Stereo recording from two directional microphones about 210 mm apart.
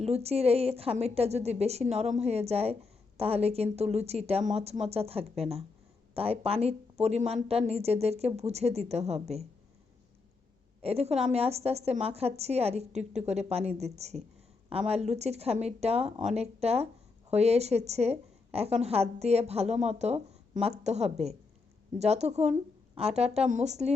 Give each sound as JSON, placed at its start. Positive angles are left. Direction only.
{"t": 0.0, "sound": "a woman's voice", "side_deg": -30}
{"t": 10.8, "sound": "a woman's voice", "side_deg": -30}